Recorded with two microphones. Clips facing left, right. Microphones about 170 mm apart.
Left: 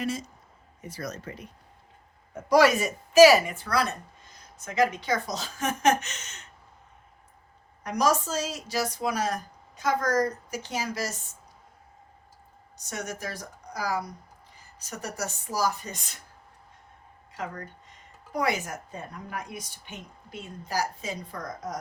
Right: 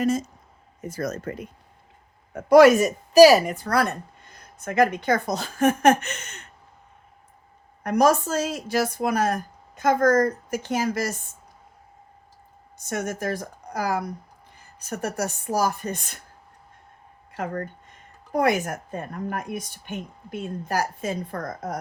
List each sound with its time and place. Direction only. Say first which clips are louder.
0.0 s a woman's voice: right 8 dB; 45° right (ahead or behind)
7.9 s a woman's voice: right 6 dB; 55° right (ahead or behind)
12.7 s speech: right 7 dB; 55° right (ahead or behind)
17.3 s a woman's voice: right 7 dB; 55° right (ahead or behind)